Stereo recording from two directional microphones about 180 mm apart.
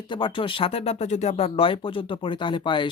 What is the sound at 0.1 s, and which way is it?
Speech, 25° left (ahead or behind).